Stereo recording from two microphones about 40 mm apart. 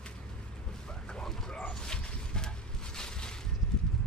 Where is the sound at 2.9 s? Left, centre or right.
Centre.